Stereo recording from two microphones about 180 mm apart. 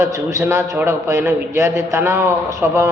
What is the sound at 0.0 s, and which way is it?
A man's voice, 15° right (ahead or behind).